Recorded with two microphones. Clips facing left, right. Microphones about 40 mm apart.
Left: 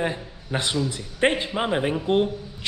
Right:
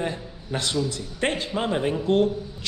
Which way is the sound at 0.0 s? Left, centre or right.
Left.